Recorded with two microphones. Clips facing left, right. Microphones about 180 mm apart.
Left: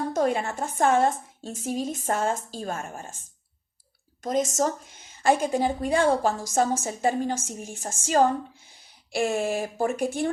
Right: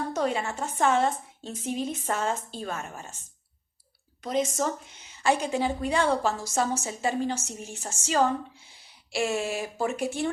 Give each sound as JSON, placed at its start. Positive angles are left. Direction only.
{"t": 0.1, "sound": "a woman's voice", "side_deg": 50}
{"t": 4.2, "sound": "a woman's voice", "side_deg": 45}